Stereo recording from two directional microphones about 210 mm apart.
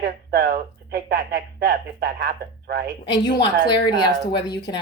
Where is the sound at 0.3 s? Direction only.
50° right (ahead or behind).